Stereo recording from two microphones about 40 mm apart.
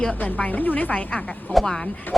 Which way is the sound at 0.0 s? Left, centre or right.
Left.